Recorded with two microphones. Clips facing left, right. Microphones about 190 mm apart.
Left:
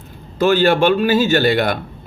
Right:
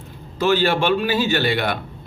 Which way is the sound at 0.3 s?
50° left (ahead or behind).